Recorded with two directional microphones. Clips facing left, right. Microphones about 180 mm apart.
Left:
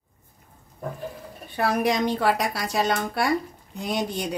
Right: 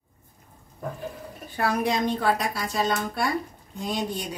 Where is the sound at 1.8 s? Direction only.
75° left (ahead or behind).